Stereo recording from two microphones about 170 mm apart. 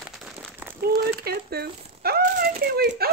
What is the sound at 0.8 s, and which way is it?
Speech, 65° right (ahead or behind).